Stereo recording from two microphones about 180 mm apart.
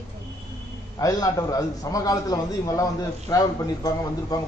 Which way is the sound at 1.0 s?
20° left (ahead or behind).